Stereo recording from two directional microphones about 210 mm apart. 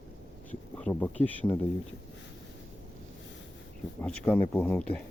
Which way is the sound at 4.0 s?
5° left (ahead or behind).